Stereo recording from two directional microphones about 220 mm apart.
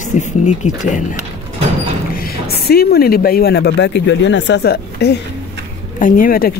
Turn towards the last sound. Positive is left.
turn(degrees=40)  # may be behind; listen again after turning